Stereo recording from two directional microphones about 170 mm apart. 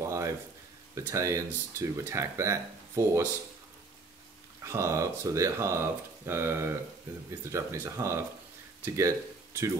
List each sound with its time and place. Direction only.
0.0 s a sound: 15° right (ahead or behind)
0.9 s speech: 15° right (ahead or behind)
4.6 s speech: 15° right (ahead or behind)